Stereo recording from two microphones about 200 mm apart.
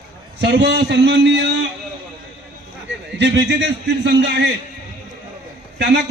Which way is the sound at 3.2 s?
60° right (ahead or behind).